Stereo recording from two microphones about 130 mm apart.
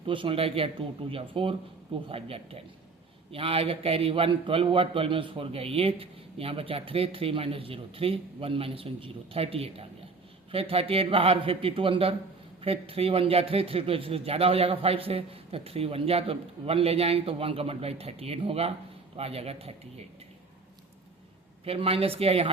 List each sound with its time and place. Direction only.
0.0 s a man's voice: 40° right (ahead or behind)
21.6 s a man's voice: 50° right (ahead or behind)